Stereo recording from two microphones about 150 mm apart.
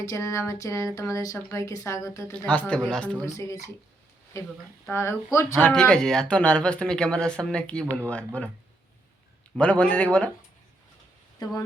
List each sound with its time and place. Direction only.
0.0 s speech: 20° left (ahead or behind)
2.5 s speech: 10° left (ahead or behind)
3.2 s speech: 20° left (ahead or behind)
5.5 s speech: 5° left (ahead or behind)
9.6 s speech: 10° left (ahead or behind)